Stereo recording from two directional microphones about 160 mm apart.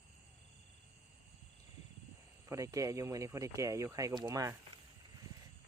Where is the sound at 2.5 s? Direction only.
20° right (ahead or behind).